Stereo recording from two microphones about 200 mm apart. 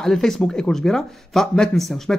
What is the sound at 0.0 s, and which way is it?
Speech, centre (ahead or behind).